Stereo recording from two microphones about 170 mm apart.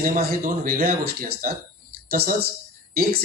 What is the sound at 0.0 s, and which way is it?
Speech, 60° right (ahead or behind).